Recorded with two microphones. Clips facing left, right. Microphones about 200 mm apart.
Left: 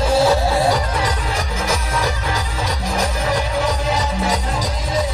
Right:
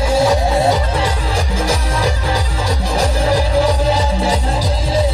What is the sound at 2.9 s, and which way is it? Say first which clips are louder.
Music: right 5 dB; 30° right (ahead or behind).